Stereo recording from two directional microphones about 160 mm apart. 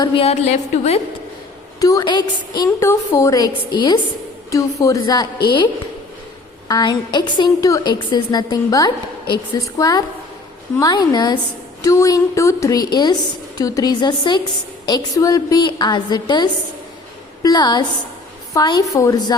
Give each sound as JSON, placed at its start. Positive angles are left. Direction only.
{"t": 0.2, "sound": "a woman's voice", "side_deg": 40}
{"t": 1.8, "sound": "a woman's voice", "side_deg": 25}
{"t": 6.7, "sound": "a woman's voice", "side_deg": 25}